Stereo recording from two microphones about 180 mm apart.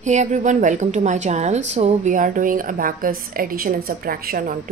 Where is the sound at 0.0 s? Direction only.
40° right (ahead or behind).